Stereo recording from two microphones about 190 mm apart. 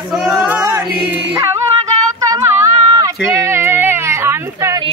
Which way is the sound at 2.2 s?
15° right (ahead or behind).